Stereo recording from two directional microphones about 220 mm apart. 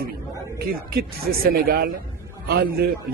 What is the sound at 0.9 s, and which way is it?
A man's voice, 45° right (ahead or behind).